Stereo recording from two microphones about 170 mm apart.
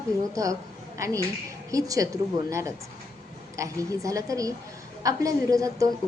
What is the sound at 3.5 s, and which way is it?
A woman's voice, 20° right (ahead or behind).